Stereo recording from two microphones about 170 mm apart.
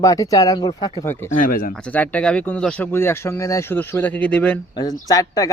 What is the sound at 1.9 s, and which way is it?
Speech, 10° left (ahead or behind).